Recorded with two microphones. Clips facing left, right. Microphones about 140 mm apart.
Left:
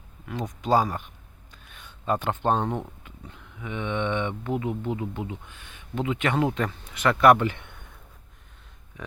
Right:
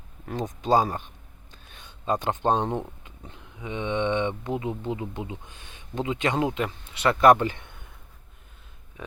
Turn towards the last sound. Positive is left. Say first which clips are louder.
# even
turn(degrees=-25)  # may be behind; listen again after turning